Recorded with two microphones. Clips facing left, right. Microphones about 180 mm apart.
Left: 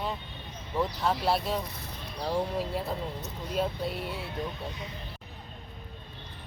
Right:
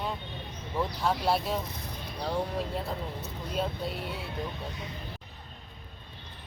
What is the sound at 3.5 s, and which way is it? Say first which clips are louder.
Speech: left 2 dB; centre (ahead or behind).